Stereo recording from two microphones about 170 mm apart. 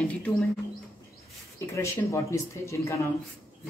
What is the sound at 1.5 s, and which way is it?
Speech, 15° left (ahead or behind).